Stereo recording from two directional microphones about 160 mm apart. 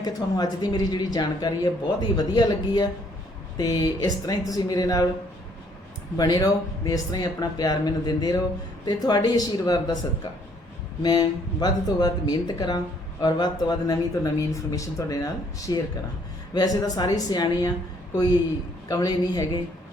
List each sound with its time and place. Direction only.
0.0 s speech: 25° left (ahead or behind)
6.1 s speech: 25° left (ahead or behind)
11.0 s speech: 25° left (ahead or behind)
18.9 s speech: 25° left (ahead or behind)